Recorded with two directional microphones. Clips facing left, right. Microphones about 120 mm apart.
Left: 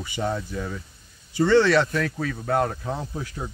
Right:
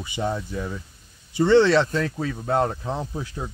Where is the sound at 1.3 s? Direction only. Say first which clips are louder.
Right 2 dB; 20° right (ahead or behind).